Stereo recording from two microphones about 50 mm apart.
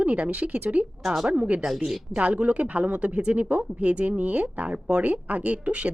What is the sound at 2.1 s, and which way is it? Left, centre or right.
A woman's voice, right.